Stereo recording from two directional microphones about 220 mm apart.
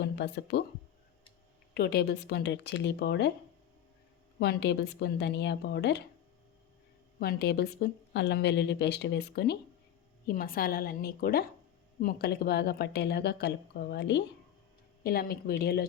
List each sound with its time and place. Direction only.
0.0 s speech: 50° left (ahead or behind)
1.7 s speech: 45° left (ahead or behind)
4.4 s speech: 50° left (ahead or behind)
7.2 s speech: 45° left (ahead or behind)